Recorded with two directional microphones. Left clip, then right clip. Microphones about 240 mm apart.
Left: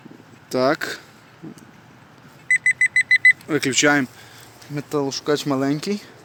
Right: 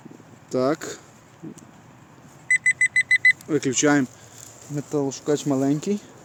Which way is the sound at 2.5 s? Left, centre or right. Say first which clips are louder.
Left 2 dB; right.